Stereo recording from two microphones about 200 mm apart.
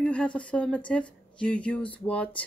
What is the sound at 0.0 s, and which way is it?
Speech, 5° left (ahead or behind).